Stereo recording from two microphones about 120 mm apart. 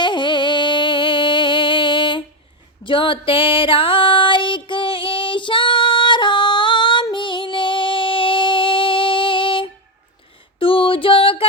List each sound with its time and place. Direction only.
0.0 s music: 40° left (ahead or behind)